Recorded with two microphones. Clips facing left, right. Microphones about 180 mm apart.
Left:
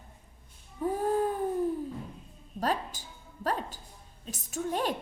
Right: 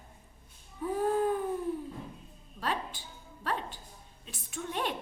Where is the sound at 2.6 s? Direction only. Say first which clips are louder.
Left 4 dB; 40° left (ahead or behind).